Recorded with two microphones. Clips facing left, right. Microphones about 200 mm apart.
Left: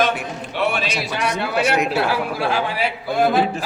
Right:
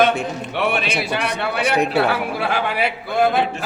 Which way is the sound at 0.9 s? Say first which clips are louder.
Right 1 dB; 60° right (ahead or behind).